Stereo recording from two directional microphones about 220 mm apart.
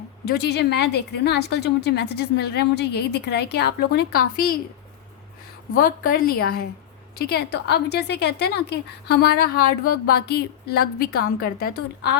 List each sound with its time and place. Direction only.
0.3 s a woman's voice: 50° left (ahead or behind)
5.8 s a woman's voice: 40° left (ahead or behind)